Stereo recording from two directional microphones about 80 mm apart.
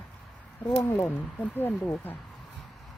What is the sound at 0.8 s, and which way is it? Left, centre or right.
Speech, left.